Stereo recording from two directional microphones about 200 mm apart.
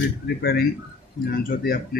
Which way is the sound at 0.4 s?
50° left (ahead or behind).